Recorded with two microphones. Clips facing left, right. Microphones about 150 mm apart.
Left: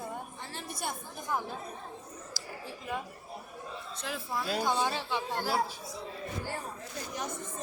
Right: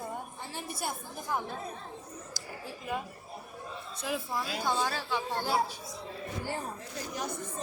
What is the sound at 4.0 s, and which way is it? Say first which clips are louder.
Speech: right 3 dB; 5° right (ahead or behind).